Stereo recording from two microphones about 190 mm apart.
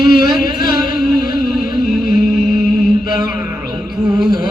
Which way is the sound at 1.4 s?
Centre (ahead or behind).